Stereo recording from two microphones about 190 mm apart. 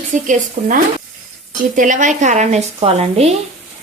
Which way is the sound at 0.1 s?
40° right (ahead or behind).